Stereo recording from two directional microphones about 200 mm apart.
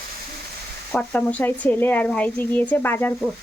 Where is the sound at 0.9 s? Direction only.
5° left (ahead or behind).